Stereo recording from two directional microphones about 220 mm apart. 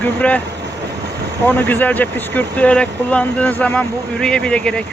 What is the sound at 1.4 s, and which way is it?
Speech, 10° left (ahead or behind).